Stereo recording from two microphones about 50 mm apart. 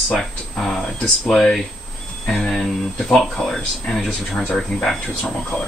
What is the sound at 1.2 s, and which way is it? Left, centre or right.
Speech, centre.